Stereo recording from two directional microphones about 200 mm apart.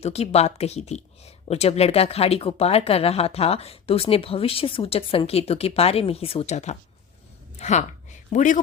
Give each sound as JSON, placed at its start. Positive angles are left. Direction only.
{"t": 0.0, "sound": "a woman's voice", "side_deg": 30}